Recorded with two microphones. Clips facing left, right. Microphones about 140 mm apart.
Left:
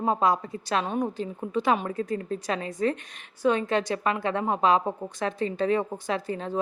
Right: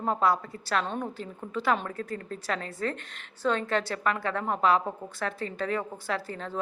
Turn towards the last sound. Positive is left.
turn(degrees=20)  # may be behind; listen again after turning